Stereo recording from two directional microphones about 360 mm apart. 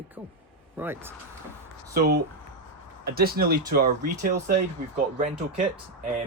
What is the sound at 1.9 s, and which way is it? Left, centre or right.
Speech, right.